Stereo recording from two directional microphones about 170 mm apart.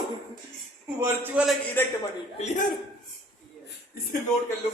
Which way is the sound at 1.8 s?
10° left (ahead or behind).